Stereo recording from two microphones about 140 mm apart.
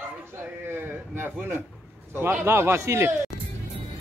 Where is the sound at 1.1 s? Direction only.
15° right (ahead or behind).